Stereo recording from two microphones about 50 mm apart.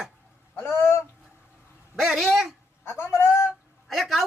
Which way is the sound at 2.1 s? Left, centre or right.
Centre.